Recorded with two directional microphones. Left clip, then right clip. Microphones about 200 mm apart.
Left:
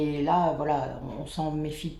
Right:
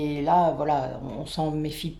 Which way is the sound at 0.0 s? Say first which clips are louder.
Right 3 dB; 40° right (ahead or behind).